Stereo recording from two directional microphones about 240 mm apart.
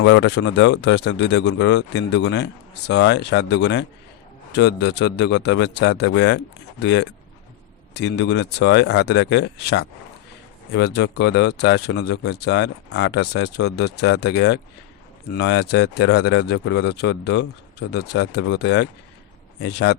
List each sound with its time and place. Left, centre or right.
0.0 s speech: left